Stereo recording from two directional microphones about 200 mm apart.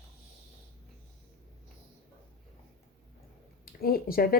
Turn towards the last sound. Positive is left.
turn(degrees=45)  # may be behind; listen again after turning